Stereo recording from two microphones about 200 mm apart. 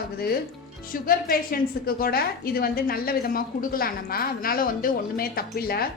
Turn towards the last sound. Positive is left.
turn(degrees=50)  # may be behind; listen again after turning